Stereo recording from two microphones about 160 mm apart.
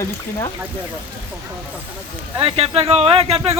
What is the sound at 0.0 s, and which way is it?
Speech, 25° left (ahead or behind).